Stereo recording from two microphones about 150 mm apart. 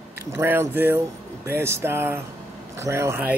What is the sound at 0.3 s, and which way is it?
Speech, 15° right (ahead or behind).